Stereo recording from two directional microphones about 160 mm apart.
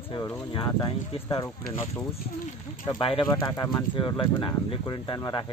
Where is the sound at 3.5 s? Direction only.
15° left (ahead or behind).